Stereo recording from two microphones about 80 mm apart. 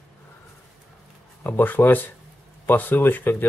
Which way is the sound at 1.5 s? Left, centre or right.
Left.